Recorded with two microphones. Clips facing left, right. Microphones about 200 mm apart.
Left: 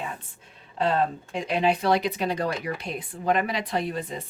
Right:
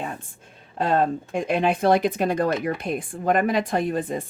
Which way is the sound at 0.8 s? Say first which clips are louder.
Right 3 dB; 50° right (ahead or behind).